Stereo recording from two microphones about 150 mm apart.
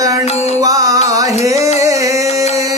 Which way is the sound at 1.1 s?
20° right (ahead or behind).